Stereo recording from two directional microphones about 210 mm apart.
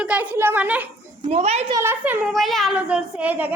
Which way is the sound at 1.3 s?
30° right (ahead or behind).